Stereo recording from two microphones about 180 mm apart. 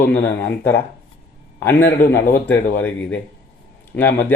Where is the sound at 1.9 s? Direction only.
50° left (ahead or behind).